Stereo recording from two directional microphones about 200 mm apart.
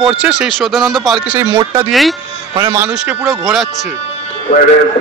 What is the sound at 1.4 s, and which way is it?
Speech, 15° right (ahead or behind).